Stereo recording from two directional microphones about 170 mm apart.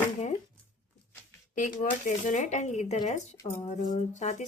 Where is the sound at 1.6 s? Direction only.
50° left (ahead or behind).